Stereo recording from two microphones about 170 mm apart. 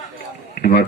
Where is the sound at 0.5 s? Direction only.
65° left (ahead or behind).